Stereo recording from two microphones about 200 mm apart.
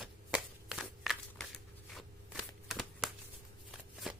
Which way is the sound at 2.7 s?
Centre (ahead or behind).